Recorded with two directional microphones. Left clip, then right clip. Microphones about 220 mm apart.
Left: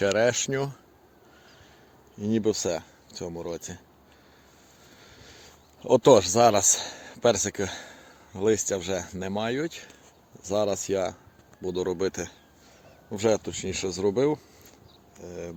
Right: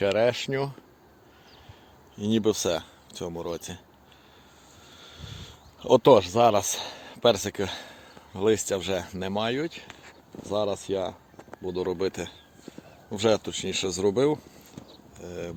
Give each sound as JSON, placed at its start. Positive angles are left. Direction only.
{"t": 0.0, "sound": "speech", "side_deg": 15}
{"t": 2.1, "sound": "speech", "side_deg": 0}
{"t": 4.9, "sound": "a sound", "side_deg": 5}
{"t": 6.1, "sound": "speech", "side_deg": 20}
{"t": 10.4, "sound": "speech", "side_deg": 25}